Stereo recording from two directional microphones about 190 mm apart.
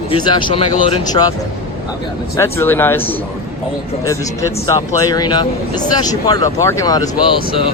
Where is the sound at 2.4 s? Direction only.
10° left (ahead or behind).